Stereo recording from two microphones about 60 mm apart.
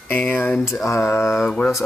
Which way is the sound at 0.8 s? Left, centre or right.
Left.